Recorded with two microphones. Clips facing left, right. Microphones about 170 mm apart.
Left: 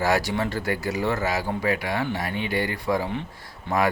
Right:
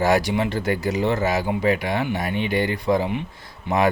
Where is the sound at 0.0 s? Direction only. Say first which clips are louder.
Right 4 dB; 20° right (ahead or behind).